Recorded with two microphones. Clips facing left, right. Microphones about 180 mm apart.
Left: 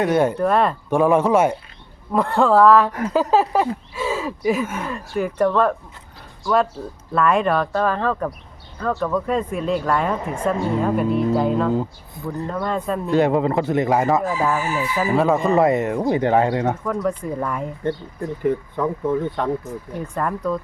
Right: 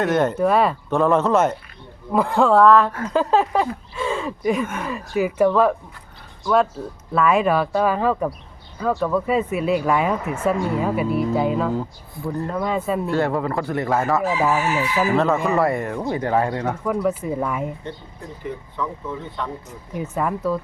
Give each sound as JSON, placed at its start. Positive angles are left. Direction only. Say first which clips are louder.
{"t": 0.0, "sound": "speech", "louder": "left 1 dB", "side_deg": 10}
{"t": 0.3, "sound": "speech", "louder": "even", "side_deg": -5}
{"t": 0.9, "sound": "speech", "louder": "left 4 dB", "side_deg": 10}
{"t": 2.1, "sound": "speech", "louder": "even", "side_deg": 0}
{"t": 7.1, "sound": "speech", "louder": "even", "side_deg": 0}
{"t": 11.7, "sound": "speech", "louder": "left 3 dB", "side_deg": 20}
{"t": 12.5, "sound": "speech", "louder": "even", "side_deg": -5}
{"t": 13.1, "sound": "speech", "louder": "left 8 dB", "side_deg": 15}
{"t": 14.5, "sound": "chicken", "louder": "right 2 dB", "side_deg": -75}
{"t": 15.1, "sound": "speech", "louder": "left 4 dB", "side_deg": 10}
{"t": 16.8, "sound": "speech", "louder": "right 1 dB", "side_deg": -10}
{"t": 18.4, "sound": "speech", "louder": "left 7 dB", "side_deg": 50}
{"t": 20.0, "sound": "speech", "louder": "right 2 dB", "side_deg": -5}